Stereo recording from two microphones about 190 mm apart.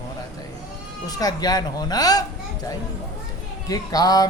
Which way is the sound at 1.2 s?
20° left (ahead or behind).